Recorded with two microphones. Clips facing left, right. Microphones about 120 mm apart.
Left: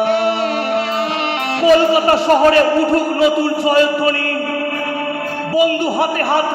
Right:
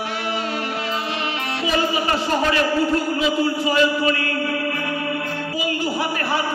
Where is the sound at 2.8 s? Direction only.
65° left (ahead or behind).